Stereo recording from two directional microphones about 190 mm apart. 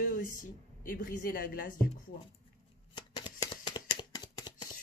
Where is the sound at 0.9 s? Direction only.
50° left (ahead or behind).